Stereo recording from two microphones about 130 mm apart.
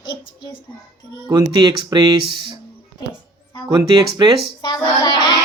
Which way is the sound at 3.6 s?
35° right (ahead or behind).